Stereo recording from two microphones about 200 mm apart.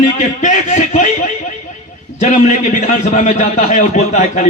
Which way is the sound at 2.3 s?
40° left (ahead or behind).